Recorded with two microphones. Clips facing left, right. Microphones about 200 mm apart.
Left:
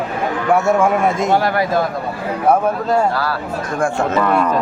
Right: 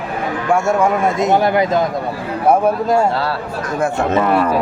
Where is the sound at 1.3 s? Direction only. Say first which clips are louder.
Right 2 dB; 20° right (ahead or behind).